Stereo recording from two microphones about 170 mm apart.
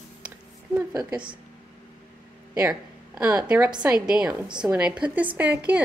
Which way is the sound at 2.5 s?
5° right (ahead or behind).